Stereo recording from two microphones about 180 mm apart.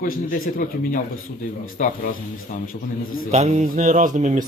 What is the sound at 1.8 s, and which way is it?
Speech, 45° left (ahead or behind).